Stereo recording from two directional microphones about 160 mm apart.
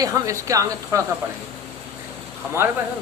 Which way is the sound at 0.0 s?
20° right (ahead or behind).